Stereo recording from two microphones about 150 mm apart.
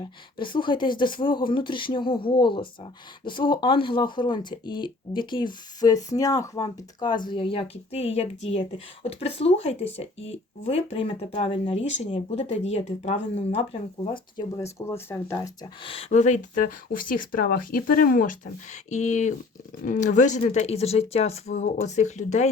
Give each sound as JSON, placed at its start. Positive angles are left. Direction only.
{"t": 0.3, "sound": "speech", "side_deg": 35}
{"t": 14.5, "sound": "speech", "side_deg": 20}
{"t": 15.8, "sound": "speech", "side_deg": 40}